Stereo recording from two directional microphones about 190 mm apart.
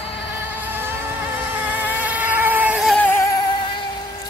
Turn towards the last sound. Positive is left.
turn(degrees=15)  # may be behind; listen again after turning